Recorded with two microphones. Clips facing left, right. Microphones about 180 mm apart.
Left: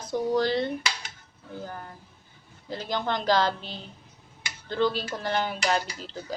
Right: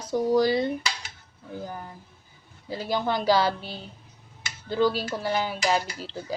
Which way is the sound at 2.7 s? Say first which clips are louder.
Right 2 dB; 10° right (ahead or behind).